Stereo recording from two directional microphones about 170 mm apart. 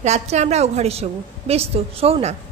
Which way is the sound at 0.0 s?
40° right (ahead or behind).